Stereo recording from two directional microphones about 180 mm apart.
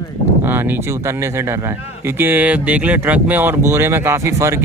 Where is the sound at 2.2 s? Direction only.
10° right (ahead or behind).